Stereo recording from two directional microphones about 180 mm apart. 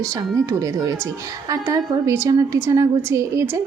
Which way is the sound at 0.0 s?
20° right (ahead or behind).